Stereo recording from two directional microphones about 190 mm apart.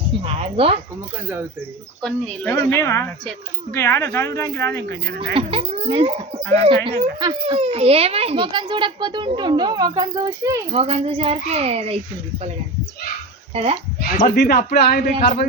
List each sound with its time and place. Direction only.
0.3 s a child's voice: 30° right (ahead or behind)
2.0 s a woman's voice: 5° left (ahead or behind)
5.0 s speech: 60° right (ahead or behind)
5.3 s a child's voice: 30° right (ahead or behind)
10.7 s a child's voice: 30° right (ahead or behind)
13.5 s speech: 30° right (ahead or behind)
14.2 s speech: 55° left (ahead or behind)